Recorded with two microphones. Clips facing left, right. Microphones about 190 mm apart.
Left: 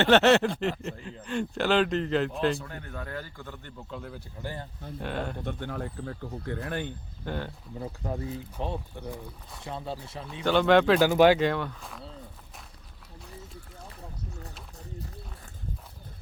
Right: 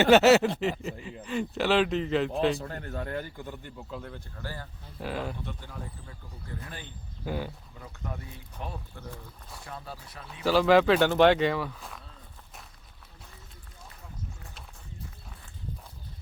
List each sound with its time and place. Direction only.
0.0 s speech: 5° right (ahead or behind)
2.6 s speech: 40° right (ahead or behind)
2.9 s a man's voice: 25° right (ahead or behind)
3.8 s speech: centre (ahead or behind)
4.4 s speech: 20° left (ahead or behind)
4.9 s speech: centre (ahead or behind)
5.4 s speech: 60° left (ahead or behind)
7.3 s a man's voice: 5° right (ahead or behind)
7.8 s speech: 30° left (ahead or behind)
10.4 s speech: centre (ahead or behind)